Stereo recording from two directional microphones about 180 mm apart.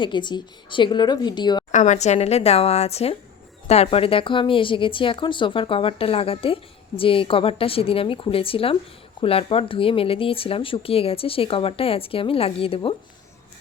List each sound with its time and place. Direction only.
0.0 s speech: 25° left (ahead or behind)
1.7 s speech: 40° left (ahead or behind)